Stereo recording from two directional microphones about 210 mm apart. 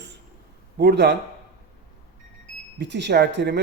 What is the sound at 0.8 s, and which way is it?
Speech, 55° right (ahead or behind).